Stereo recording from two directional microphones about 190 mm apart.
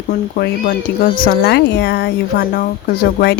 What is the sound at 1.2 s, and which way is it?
Speech, 60° left (ahead or behind).